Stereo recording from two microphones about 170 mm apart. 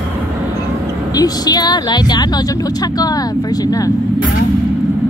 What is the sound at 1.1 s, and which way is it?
A woman's voice, 20° left (ahead or behind).